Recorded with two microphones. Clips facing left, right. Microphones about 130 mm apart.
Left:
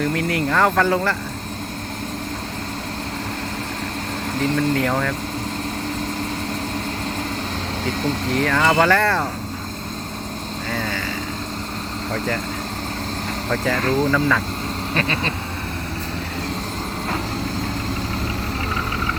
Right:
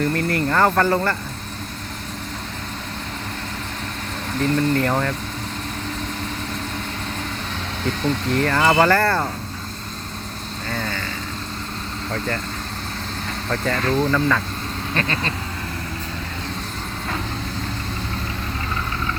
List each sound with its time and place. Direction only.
0.1 s speech: 5° left (ahead or behind)
4.4 s speech: 5° left (ahead or behind)
7.9 s speech: 5° left (ahead or behind)
10.7 s speech: 5° left (ahead or behind)
13.5 s speech: 10° left (ahead or behind)